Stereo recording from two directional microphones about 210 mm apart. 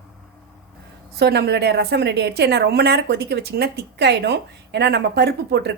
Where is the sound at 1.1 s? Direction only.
50° right (ahead or behind).